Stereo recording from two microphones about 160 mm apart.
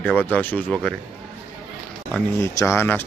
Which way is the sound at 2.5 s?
15° left (ahead or behind).